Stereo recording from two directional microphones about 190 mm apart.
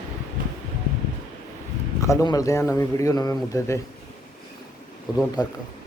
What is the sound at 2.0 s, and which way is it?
Speech, 20° left (ahead or behind).